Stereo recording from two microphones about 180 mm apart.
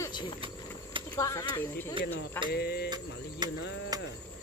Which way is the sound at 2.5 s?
65° left (ahead or behind).